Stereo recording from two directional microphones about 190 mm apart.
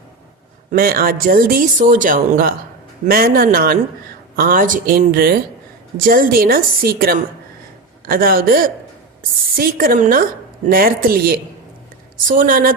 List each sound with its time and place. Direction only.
0.7 s speech: 50° right (ahead or behind)